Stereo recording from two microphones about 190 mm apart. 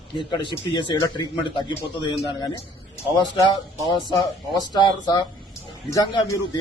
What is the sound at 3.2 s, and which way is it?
Speech, 25° left (ahead or behind).